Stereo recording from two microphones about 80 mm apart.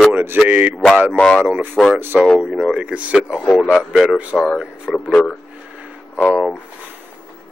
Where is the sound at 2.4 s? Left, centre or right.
Centre.